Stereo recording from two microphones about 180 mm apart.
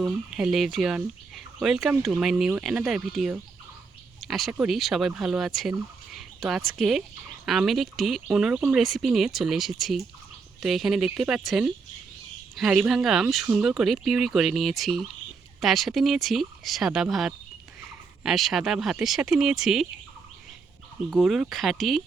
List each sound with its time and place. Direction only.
0.0 s speech: 5° right (ahead or behind)
21.1 s speech: centre (ahead or behind)